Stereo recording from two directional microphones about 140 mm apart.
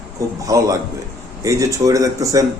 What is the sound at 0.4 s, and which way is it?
A man's voice, 25° right (ahead or behind).